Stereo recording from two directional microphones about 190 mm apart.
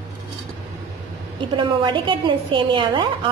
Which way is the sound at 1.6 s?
25° right (ahead or behind).